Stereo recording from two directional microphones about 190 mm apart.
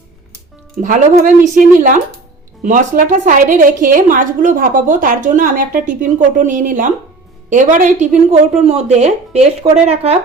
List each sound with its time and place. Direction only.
0.8 s a woman's voice: 40° right (ahead or behind)